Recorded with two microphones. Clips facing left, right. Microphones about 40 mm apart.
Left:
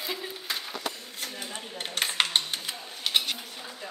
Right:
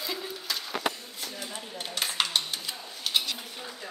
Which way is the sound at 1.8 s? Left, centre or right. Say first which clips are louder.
Left 2 dB; left.